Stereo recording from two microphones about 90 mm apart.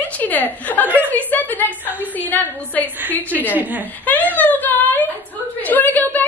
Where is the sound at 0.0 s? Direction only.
20° left (ahead or behind).